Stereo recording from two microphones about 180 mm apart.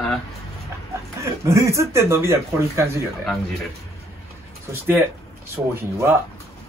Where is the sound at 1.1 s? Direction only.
15° right (ahead or behind).